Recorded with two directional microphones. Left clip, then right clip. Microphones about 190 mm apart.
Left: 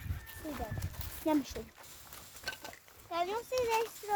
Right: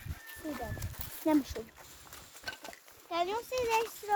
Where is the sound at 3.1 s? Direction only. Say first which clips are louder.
Right 1 dB; 50° right (ahead or behind).